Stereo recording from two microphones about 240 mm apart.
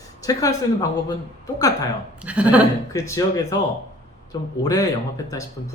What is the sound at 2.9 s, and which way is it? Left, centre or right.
Speech, centre.